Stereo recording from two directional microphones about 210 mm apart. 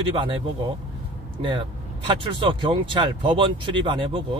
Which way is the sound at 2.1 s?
25° right (ahead or behind).